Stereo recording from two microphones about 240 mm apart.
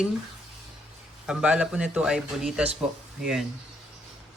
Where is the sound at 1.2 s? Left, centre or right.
Centre.